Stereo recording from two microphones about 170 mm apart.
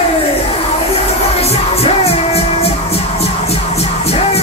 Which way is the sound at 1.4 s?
35° left (ahead or behind).